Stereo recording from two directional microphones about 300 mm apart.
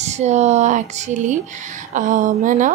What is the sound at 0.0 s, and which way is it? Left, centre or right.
Speech, right.